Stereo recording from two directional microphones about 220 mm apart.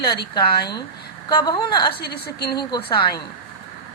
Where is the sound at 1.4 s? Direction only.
20° left (ahead or behind).